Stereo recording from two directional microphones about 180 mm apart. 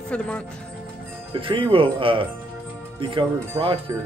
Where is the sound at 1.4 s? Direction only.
30° right (ahead or behind).